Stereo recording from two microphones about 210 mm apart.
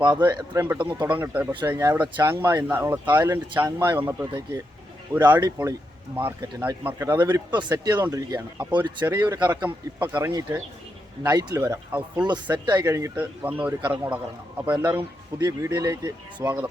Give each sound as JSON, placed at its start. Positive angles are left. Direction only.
{"t": 0.0, "sound": "speech", "side_deg": -20}
{"t": 1.0, "sound": "speech", "side_deg": -5}
{"t": 9.6, "sound": "speech", "side_deg": -10}